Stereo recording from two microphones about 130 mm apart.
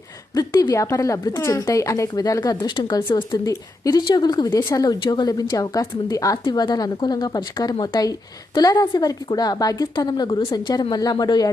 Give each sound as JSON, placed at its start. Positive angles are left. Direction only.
{"t": 0.3, "sound": "a woman's voice", "side_deg": 30}
{"t": 3.4, "sound": "a woman's voice", "side_deg": 25}